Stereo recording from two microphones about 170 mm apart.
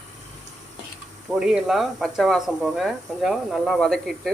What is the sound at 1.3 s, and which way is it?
Speech, 5° right (ahead or behind).